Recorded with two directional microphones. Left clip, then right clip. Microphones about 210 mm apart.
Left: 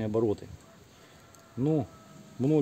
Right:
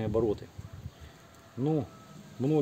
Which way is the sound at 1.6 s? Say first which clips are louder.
Left 2 dB; 35° left (ahead or behind).